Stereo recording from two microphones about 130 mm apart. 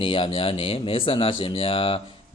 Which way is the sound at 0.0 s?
40° left (ahead or behind).